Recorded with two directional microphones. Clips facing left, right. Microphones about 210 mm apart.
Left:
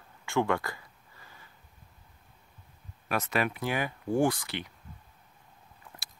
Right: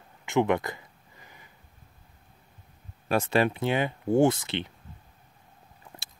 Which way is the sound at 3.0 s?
30° right (ahead or behind).